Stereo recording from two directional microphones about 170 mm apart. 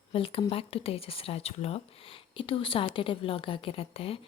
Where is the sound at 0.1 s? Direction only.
35° left (ahead or behind).